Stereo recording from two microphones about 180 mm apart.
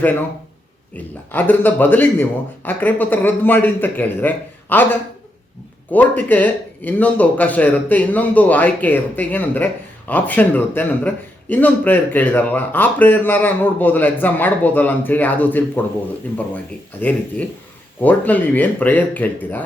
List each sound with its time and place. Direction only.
0.9 s a man's voice: 10° left (ahead or behind)
17.0 s a man's voice: 10° left (ahead or behind)